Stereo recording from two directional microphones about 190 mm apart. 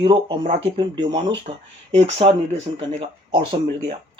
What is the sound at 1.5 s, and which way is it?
Speech, 35° right (ahead or behind).